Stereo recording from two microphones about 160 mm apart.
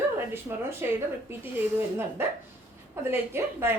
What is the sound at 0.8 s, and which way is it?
Speech, 15° right (ahead or behind).